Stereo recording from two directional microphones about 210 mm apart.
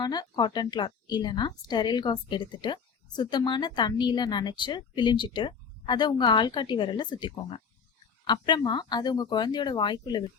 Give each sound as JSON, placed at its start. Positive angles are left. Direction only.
{"t": 0.0, "sound": "speech", "side_deg": 20}